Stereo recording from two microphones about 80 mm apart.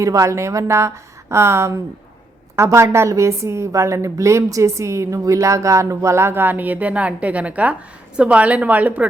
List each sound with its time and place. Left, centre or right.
0.0 s a woman's voice: right; by 9.0 s centre